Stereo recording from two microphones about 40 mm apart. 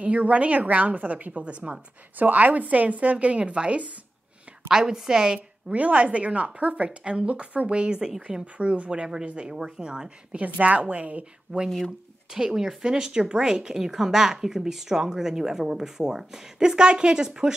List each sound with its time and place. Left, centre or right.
0.0 s a woman's voice: right
4.6 s speech: centre
5.7 s a woman's voice: right
7.6 s a woman's voice: right
9.0 s speech: right
10.3 s a woman's voice: right
12.3 s speech: centre